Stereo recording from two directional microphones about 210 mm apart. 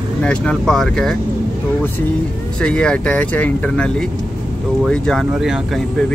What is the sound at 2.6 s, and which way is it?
Speech, 5° left (ahead or behind).